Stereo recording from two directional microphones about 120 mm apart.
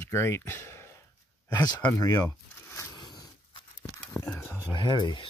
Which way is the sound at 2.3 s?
20° left (ahead or behind).